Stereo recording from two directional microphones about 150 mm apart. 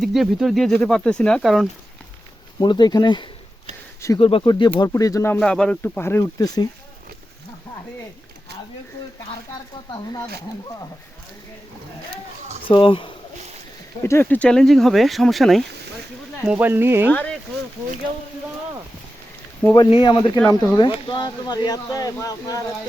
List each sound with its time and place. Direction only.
0.0 s speech: centre (ahead or behind)
2.6 s speech: 30° left (ahead or behind)
5.4 s speech: 5° left (ahead or behind); by 6.7 s 25° left (ahead or behind)
9.9 s speech: 25° left (ahead or behind)
12.6 s speech: 35° left (ahead or behind)
14.0 s speech: 15° left (ahead or behind)
16.5 s speech: 10° right (ahead or behind)
17.1 s speech: 10° left (ahead or behind)
19.9 s speech: 35° left (ahead or behind)